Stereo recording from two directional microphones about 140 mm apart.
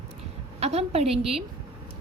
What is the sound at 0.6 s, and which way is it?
Speech, 50° right (ahead or behind).